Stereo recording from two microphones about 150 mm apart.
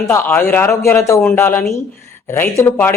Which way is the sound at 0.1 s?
15° left (ahead or behind).